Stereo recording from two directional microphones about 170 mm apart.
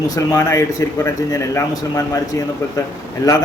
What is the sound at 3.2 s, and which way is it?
Speech, 20° left (ahead or behind).